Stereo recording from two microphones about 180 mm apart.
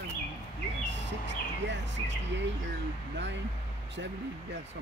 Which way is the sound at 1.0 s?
80° right.